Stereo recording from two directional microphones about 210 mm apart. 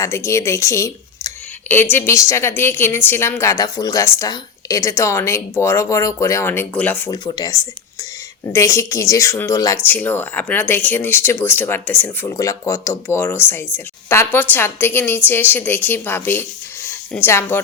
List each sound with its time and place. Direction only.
0.0 s a woman's voice: 15° left (ahead or behind)